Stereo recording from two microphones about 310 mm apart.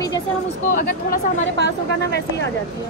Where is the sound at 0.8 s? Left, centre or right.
Left.